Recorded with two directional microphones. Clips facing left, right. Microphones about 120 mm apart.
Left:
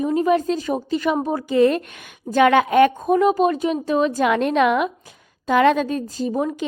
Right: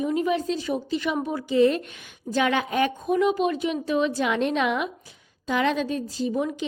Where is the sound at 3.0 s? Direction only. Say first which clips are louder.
Left 5 dB; 45° left (ahead or behind).